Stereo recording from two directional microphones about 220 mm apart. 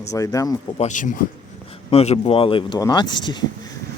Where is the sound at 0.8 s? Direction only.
35° left (ahead or behind); by 3.4 s 20° left (ahead or behind).